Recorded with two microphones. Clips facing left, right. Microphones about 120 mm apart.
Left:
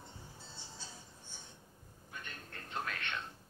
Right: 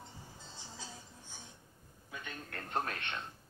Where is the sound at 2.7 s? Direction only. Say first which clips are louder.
Right 4 dB; 40° right (ahead or behind).